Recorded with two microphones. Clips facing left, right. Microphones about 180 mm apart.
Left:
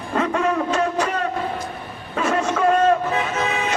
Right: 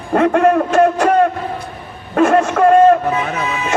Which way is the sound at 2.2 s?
55° right (ahead or behind).